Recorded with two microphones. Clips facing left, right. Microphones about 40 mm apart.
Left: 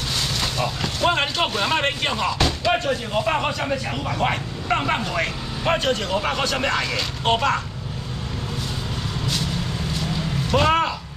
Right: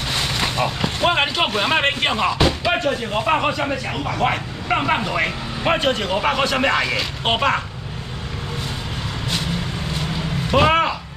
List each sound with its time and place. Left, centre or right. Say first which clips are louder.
0.1 s speech: right 4 dB; right
10.5 s speech: right 3 dB; centre